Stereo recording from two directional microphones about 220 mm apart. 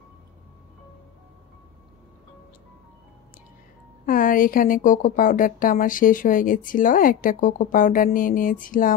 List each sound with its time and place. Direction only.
4.0 s a woman's voice: 40° left (ahead or behind)